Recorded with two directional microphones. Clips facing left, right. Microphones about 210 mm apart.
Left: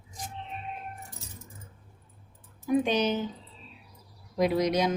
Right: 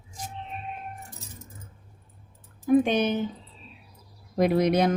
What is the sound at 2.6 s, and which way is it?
Speech, 55° right (ahead or behind).